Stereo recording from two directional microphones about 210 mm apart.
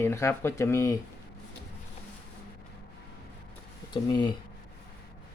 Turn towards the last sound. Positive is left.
turn(degrees=20)  # may be behind; listen again after turning